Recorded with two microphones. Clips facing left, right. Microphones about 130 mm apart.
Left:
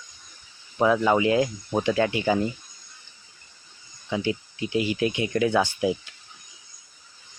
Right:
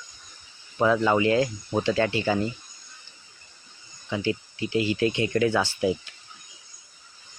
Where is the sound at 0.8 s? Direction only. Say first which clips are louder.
Left 1 dB; 10° left (ahead or behind).